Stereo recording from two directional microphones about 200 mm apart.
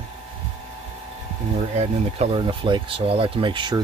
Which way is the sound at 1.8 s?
30° right (ahead or behind).